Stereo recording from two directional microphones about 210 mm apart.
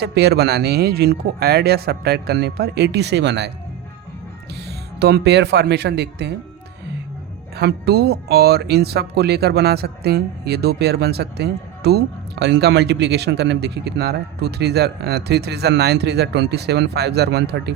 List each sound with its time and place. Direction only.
0.0 s speech: 50° right (ahead or behind)
4.9 s speech: 50° right (ahead or behind)
7.5 s speech: 50° right (ahead or behind)